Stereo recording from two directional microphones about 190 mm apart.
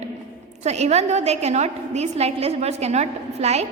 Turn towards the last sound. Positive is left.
turn(degrees=-35)  # may be behind; listen again after turning